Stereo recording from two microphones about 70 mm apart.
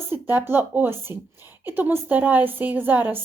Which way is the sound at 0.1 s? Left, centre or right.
Right.